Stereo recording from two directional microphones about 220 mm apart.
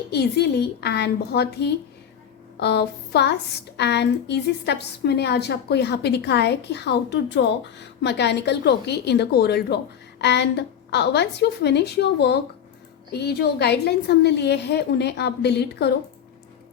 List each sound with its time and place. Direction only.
0.1 s a woman's voice: 50° left (ahead or behind)